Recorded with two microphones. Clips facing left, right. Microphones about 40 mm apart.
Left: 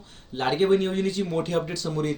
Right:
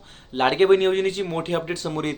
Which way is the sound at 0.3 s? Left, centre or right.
Right.